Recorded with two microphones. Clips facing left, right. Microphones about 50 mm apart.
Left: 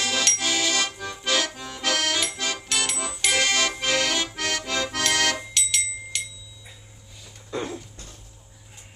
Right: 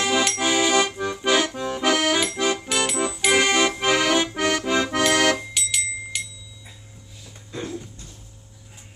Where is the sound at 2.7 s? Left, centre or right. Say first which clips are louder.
Right 5 dB; centre.